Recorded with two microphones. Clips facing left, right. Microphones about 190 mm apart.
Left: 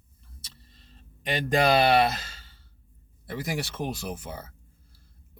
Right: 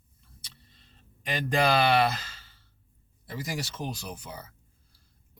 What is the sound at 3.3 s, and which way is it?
Speech, 60° left (ahead or behind).